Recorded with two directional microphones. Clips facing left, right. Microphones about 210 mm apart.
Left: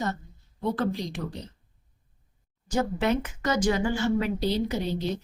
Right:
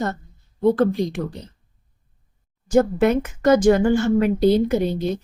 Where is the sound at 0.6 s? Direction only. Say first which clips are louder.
Right 10 dB; 50° right (ahead or behind).